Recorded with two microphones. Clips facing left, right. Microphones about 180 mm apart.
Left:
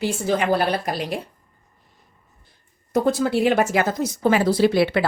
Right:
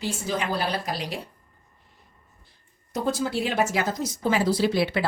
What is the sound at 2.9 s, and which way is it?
Speech, 60° left (ahead or behind).